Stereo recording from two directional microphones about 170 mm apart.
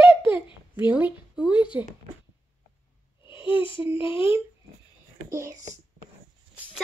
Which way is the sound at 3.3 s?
30° left (ahead or behind).